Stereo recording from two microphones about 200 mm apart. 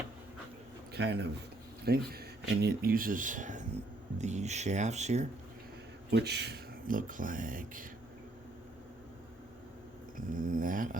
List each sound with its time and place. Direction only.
0.9 s a man's voice: 55° right (ahead or behind); by 5.3 s 35° right (ahead or behind)
6.1 s speech: 55° right (ahead or behind)
10.2 s speech: 40° right (ahead or behind)